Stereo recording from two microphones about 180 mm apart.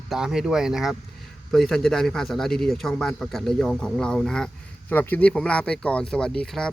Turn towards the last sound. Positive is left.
turn(degrees=5)  # may be behind; listen again after turning